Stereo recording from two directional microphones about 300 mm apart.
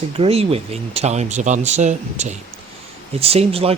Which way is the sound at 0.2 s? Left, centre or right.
Centre.